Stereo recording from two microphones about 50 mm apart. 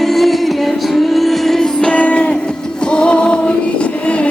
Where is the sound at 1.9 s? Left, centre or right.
Left.